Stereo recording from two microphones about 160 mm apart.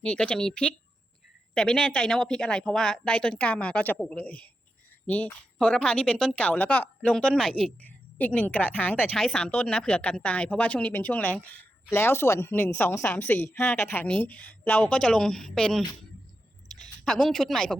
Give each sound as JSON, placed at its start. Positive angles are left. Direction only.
{"t": 0.0, "sound": "a woman's voice", "side_deg": 5}